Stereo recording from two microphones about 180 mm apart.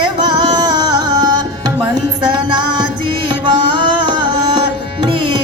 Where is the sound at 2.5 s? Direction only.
25° right (ahead or behind).